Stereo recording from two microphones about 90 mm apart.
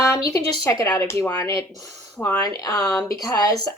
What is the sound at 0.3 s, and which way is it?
Speech, 35° left (ahead or behind).